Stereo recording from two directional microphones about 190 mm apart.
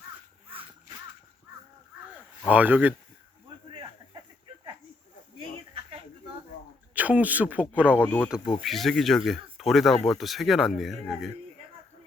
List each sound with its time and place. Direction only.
2.5 s speech: 10° right (ahead or behind)
6.9 s speech: 10° right (ahead or behind)
8.0 s speech: 10° left (ahead or behind)